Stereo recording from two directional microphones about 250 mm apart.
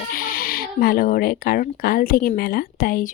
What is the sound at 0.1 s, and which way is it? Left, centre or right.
Speech, left.